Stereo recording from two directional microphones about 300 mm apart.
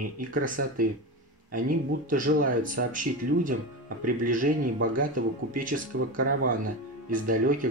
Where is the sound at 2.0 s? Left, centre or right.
Right.